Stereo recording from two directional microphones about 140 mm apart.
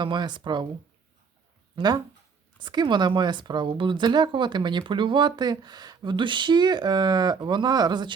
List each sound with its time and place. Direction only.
0.0 s speech: 35° right (ahead or behind)
1.7 s speech: 30° right (ahead or behind)